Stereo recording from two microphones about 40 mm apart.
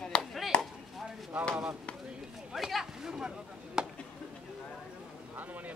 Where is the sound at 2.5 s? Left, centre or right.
Centre.